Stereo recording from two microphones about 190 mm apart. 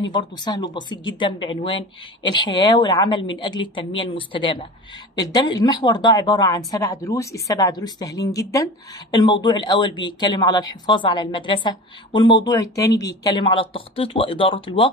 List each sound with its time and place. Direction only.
0.1 s speech: 20° left (ahead or behind)